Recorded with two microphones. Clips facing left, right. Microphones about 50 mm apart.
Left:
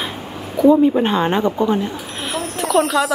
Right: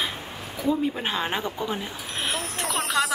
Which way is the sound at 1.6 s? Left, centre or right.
Centre.